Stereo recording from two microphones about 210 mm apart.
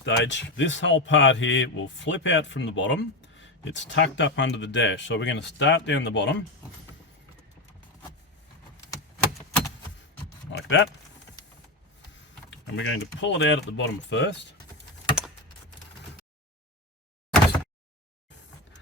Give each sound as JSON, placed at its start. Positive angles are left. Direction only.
{"t": 0.0, "sound": "speech", "side_deg": 60}
{"t": 10.5, "sound": "keys jangling", "side_deg": 60}
{"t": 12.5, "sound": "speech", "side_deg": 60}
{"t": 17.3, "sound": "a sound", "side_deg": 5}